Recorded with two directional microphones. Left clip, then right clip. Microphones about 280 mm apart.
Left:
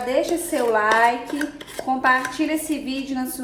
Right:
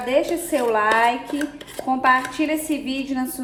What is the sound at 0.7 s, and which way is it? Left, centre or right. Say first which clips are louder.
A woman's voice: left 1 dB; right.